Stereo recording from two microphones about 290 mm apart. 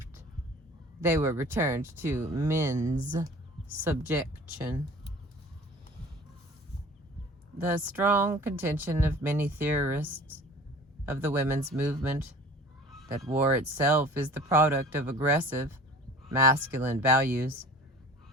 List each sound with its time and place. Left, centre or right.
1.0 s speech: centre
2.7 s speech: right
3.8 s speech: centre
7.7 s speech: centre